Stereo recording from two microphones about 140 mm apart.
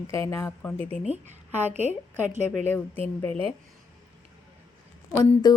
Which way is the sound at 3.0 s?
15° left (ahead or behind).